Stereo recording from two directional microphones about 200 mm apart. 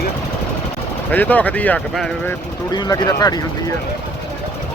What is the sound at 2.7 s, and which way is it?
Speech, 20° left (ahead or behind).